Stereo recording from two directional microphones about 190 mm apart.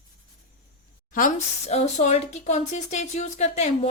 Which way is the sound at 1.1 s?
40° left (ahead or behind).